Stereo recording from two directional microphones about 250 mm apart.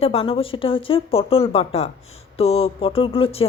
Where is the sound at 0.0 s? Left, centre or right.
Left.